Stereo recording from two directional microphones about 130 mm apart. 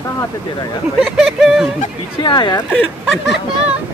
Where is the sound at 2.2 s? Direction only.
35° left (ahead or behind).